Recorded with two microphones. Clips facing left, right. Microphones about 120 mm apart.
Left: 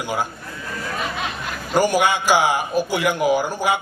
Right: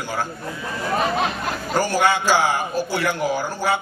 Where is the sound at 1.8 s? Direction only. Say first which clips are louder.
Left 2 dB; 15° left (ahead or behind).